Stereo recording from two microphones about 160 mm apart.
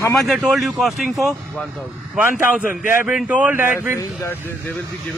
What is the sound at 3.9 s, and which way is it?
Speech, 15° left (ahead or behind).